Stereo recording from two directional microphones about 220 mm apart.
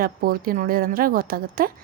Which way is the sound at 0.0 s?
40° right (ahead or behind).